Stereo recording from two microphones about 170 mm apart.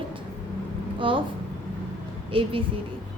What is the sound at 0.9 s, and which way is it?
Speech, 30° right (ahead or behind).